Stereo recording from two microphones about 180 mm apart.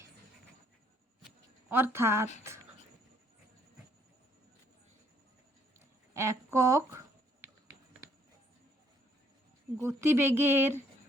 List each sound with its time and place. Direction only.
1.7 s speech: 15° right (ahead or behind)
6.1 s speech: 15° right (ahead or behind)
9.8 s speech: 15° right (ahead or behind)